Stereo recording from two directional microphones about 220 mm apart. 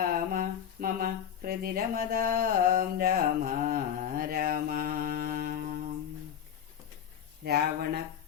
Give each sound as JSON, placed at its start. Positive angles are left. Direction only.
{"t": 0.0, "sound": "speech", "side_deg": -40}
{"t": 7.4, "sound": "speech", "side_deg": -45}